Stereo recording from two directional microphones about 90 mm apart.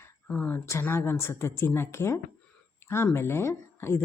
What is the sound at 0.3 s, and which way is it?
A woman's voice, 15° left (ahead or behind).